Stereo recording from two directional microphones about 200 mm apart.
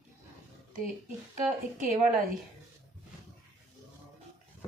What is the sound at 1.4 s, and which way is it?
Speech, 40° right (ahead or behind).